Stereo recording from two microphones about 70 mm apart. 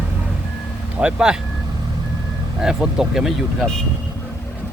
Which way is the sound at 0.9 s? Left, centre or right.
Centre.